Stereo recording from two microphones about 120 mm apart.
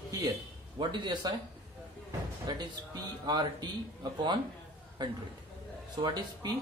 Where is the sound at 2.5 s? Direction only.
35° right (ahead or behind).